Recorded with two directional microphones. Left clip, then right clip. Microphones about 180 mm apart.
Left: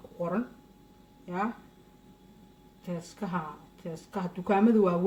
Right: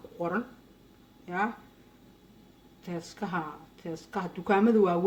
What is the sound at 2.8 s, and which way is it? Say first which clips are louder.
Speech: right 1 dB; 15° right (ahead or behind).